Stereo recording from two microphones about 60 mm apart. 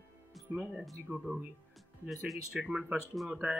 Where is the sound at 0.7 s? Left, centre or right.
Centre.